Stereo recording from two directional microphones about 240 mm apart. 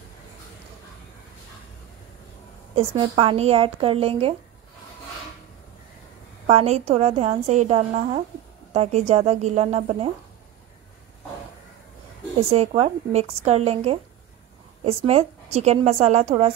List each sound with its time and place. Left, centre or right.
2.7 s a woman's voice: right
6.4 s a woman's voice: right
12.4 s a woman's voice: right